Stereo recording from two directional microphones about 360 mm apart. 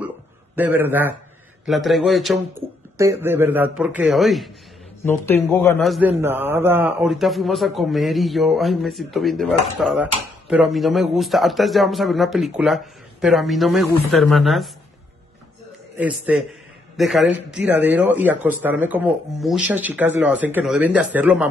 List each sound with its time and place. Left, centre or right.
0.6 s a man's voice: centre
16.0 s a man's voice: centre